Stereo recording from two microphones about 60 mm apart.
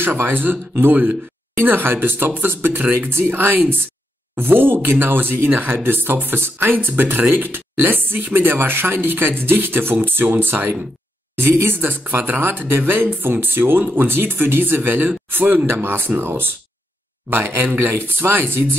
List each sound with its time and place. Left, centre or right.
0.0 s speech: right